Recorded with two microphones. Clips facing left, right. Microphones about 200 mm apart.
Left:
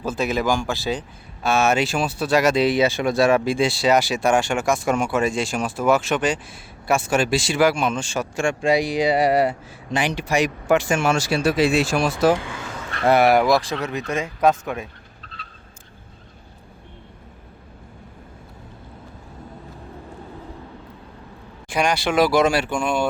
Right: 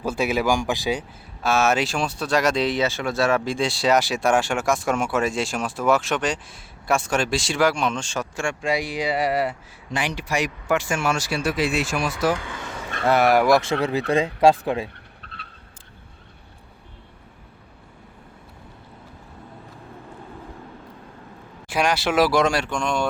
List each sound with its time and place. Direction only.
0.0 s speech: 10° right (ahead or behind)
1.4 s speech: centre (ahead or behind)
8.4 s speech: 20° left (ahead or behind)
13.1 s speech: 15° left (ahead or behind)
13.3 s speech: 10° right (ahead or behind)
13.6 s speech: 30° right (ahead or behind)
15.2 s vehicle: 60° right (ahead or behind)
21.7 s speech: 5° right (ahead or behind)